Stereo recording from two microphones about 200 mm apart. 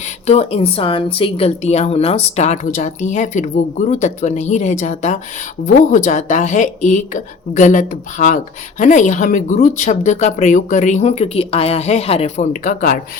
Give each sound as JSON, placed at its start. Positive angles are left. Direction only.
{"t": 0.3, "sound": "speech", "side_deg": 30}